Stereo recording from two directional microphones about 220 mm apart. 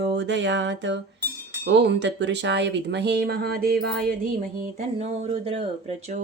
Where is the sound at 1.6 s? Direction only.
50° right (ahead or behind).